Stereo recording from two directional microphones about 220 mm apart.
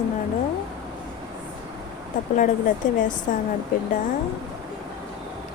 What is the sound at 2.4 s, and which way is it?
Speech, 35° left (ahead or behind).